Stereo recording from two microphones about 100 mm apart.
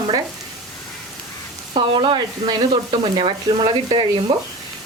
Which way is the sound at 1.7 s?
65° right (ahead or behind).